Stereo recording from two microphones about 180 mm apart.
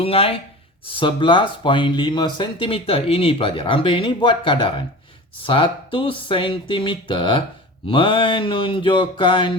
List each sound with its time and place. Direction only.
0.0 s speech: 30° left (ahead or behind)